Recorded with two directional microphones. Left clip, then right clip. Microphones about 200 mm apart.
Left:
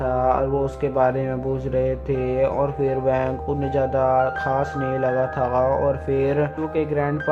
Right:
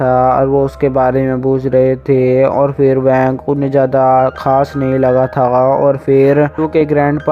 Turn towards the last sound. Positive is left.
turn(degrees=-40)  # may be behind; listen again after turning